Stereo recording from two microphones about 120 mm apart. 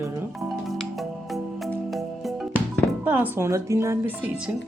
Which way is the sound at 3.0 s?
15° right (ahead or behind).